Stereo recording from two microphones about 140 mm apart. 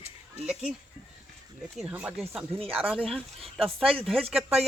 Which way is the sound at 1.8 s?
5° right (ahead or behind).